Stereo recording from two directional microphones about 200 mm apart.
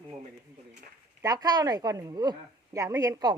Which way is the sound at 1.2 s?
20° right (ahead or behind).